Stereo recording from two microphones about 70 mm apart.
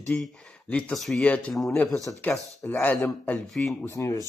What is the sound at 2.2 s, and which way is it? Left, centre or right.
Speech, left.